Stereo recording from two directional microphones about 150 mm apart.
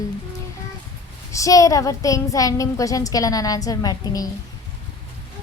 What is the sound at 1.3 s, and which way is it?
A woman's voice, 20° left (ahead or behind).